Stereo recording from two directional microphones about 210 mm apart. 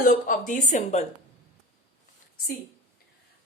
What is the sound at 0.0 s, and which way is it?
A woman's voice, 40° left (ahead or behind).